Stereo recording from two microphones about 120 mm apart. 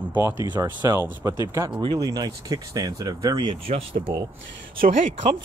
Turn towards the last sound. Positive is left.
turn(degrees=-90)